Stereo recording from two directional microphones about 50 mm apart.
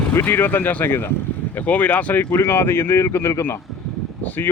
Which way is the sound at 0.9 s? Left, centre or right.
Left.